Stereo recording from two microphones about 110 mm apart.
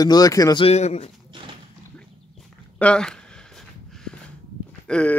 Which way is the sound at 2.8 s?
10° left (ahead or behind).